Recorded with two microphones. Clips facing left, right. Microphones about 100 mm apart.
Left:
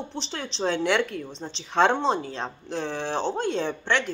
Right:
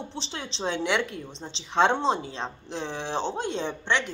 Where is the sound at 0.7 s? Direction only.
45° left (ahead or behind).